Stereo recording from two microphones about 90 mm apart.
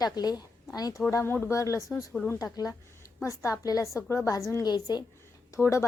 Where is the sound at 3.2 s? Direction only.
35° left (ahead or behind).